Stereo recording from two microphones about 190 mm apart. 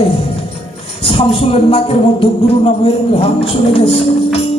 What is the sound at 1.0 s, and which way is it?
Speech, 30° left (ahead or behind).